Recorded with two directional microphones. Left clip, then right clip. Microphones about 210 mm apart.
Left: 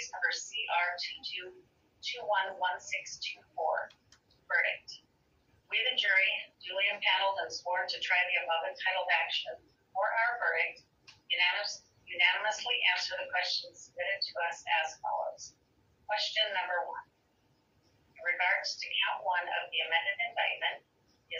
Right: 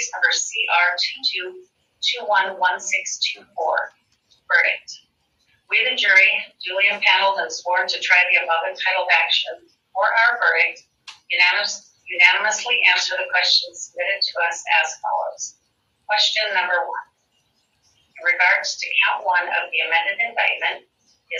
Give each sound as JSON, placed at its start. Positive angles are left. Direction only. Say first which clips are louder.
{"t": 0.0, "sound": "a man's voice", "louder": "right 14 dB", "side_deg": -45}
{"t": 18.1, "sound": "a man's voice", "louder": "right 13 dB", "side_deg": -45}